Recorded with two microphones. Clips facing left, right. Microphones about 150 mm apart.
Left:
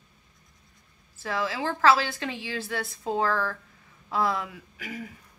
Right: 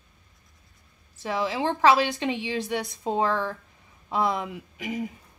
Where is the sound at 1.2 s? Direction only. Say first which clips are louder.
Right 3 dB; 20° right (ahead or behind).